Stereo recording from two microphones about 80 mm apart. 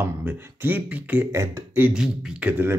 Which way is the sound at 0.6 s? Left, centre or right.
Right.